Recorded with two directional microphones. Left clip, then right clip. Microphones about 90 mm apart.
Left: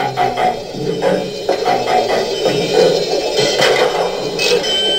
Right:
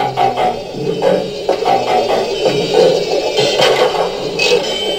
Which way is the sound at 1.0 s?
15° left (ahead or behind).